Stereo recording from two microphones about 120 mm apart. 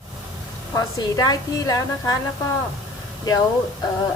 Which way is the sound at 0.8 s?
30° left (ahead or behind).